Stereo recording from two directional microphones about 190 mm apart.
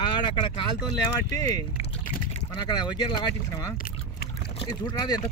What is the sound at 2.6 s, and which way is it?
Speech, 20° left (ahead or behind).